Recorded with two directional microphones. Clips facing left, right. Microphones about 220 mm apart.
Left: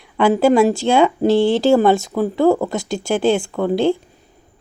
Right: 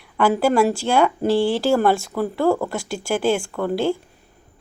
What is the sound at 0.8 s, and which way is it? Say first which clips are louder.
Speech: left 4 dB; 20° left (ahead or behind).